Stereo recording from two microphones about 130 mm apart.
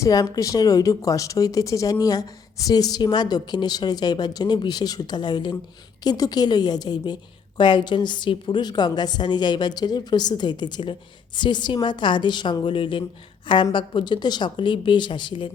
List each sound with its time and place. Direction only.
0.0 s a woman's voice: 25° left (ahead or behind)